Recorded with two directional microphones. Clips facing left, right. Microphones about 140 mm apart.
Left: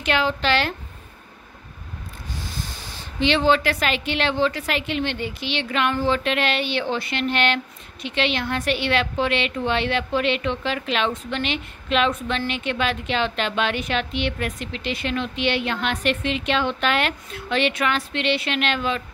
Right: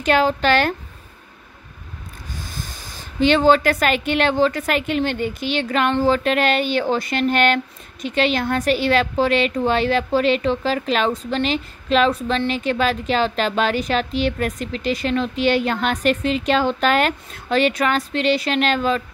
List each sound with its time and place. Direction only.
0.0 s a woman's voice: 40° right (ahead or behind)
2.4 s speech: 45° right (ahead or behind)